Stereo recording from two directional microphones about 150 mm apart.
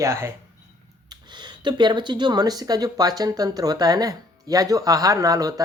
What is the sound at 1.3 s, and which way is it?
Speech, 30° right (ahead or behind).